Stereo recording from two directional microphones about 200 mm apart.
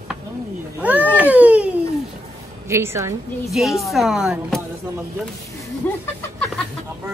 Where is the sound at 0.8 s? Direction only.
10° right (ahead or behind).